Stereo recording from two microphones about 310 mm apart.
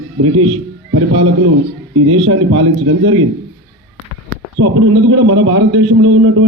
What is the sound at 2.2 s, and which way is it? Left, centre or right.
A man's voice, right.